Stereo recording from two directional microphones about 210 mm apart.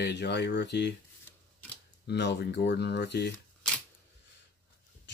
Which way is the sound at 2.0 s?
55° left (ahead or behind).